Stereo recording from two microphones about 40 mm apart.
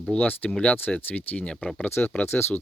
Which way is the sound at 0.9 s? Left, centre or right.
Left.